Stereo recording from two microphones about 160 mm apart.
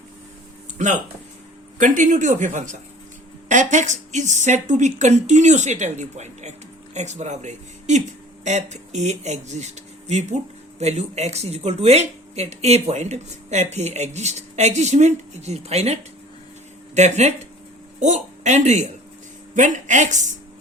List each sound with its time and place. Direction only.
0.8 s speech: 50° right (ahead or behind)